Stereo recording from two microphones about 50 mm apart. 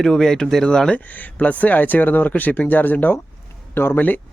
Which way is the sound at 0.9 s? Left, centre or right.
Left.